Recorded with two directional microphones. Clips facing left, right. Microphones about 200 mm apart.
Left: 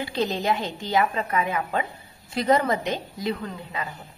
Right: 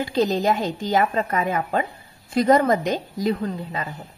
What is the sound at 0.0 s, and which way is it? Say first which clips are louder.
A woman's voice: right 5 dB; 40° right (ahead or behind).